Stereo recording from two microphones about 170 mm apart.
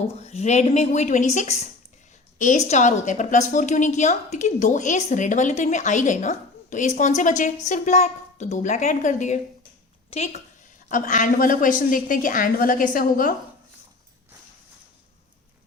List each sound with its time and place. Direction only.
0.1 s a woman's voice: 40° left (ahead or behind)
10.8 s a woman's voice: 50° left (ahead or behind)